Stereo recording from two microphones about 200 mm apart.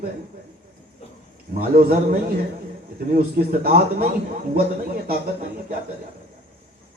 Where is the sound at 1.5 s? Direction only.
45° right (ahead or behind).